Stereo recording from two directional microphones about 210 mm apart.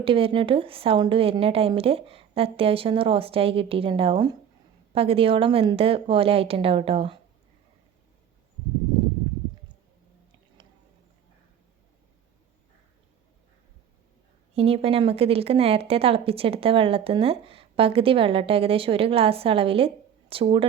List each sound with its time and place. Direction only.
0.0 s speech: 25° right (ahead or behind)
14.5 s speech: 30° right (ahead or behind)